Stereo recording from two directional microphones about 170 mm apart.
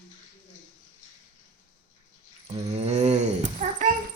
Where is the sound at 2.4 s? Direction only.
40° right (ahead or behind).